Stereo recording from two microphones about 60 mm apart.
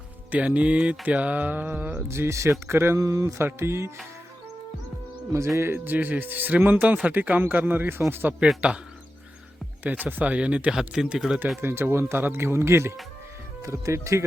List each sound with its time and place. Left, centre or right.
0.3 s speech: right
2.0 s speech: right
3.0 s speech: right
3.3 s speech: right
5.5 s speech: right
8.6 s speech: right
9.8 s speech: right; by 11.3 s centre
11.6 s speech: right
13.6 s speech: right